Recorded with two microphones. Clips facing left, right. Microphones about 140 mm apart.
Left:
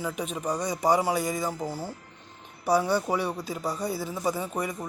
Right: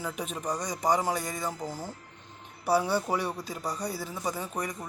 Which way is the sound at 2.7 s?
10° right (ahead or behind).